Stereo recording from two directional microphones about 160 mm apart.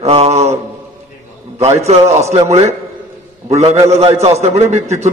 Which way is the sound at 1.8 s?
40° right (ahead or behind).